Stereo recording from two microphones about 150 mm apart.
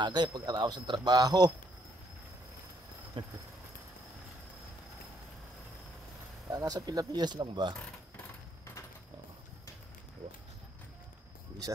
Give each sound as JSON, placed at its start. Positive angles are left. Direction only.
{"t": 0.0, "sound": "a man's voice", "side_deg": -30}
{"t": 3.2, "sound": "a sound", "side_deg": -35}
{"t": 6.5, "sound": "a man's voice", "side_deg": -25}